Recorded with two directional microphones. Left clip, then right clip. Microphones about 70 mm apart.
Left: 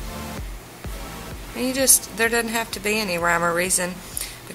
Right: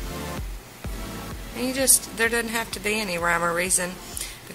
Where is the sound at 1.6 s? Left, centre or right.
Centre.